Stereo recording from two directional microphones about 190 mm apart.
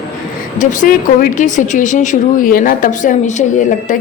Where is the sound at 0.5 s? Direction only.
40° left (ahead or behind).